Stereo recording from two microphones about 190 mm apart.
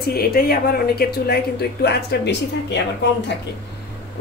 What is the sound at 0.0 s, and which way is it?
Speech, 50° left (ahead or behind).